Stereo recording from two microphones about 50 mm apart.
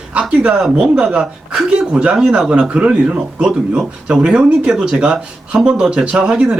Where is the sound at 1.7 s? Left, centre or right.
Right.